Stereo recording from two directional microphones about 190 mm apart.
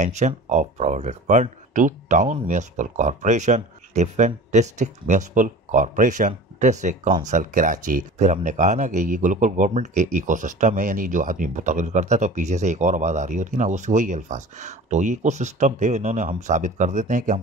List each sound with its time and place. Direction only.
0.0 s speech: 40° right (ahead or behind)